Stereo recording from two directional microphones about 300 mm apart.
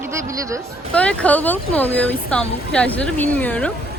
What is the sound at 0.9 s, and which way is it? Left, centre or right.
Speech, centre.